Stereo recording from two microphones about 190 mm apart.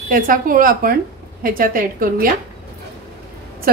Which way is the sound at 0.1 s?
45° right (ahead or behind).